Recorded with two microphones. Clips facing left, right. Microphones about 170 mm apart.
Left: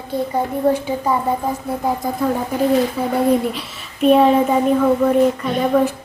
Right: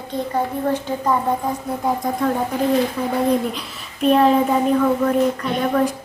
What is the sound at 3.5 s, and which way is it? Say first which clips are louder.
A woman's voice: left 1 dB; 5° left (ahead or behind).